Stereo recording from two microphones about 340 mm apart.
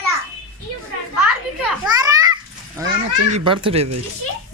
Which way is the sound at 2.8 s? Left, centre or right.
Centre.